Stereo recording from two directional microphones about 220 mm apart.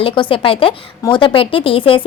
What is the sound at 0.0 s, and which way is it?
A woman's voice, 25° left (ahead or behind).